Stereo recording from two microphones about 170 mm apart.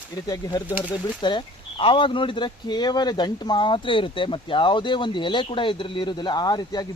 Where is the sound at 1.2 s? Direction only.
30° left (ahead or behind).